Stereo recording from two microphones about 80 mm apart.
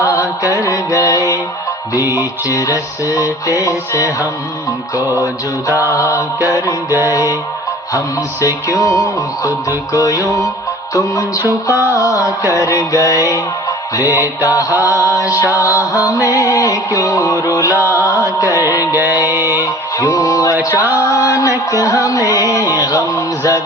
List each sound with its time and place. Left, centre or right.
0.0 s mantra: left
1.9 s music: left
6.0 s music: left
11.4 s music: right
11.9 s music: left
15.3 s music: right
15.6 s music: left
17.7 s music: right
18.3 s music: left
18.9 s music: right
19.3 s mantra: right
20.0 s music: left